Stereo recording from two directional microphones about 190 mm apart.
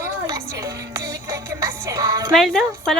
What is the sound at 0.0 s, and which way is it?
Music, 15° right (ahead or behind).